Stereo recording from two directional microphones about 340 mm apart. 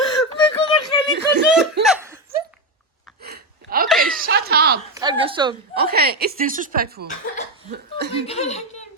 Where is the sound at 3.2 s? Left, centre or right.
Right.